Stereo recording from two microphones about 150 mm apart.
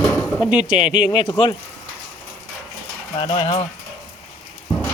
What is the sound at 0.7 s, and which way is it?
Speech, 5° right (ahead or behind).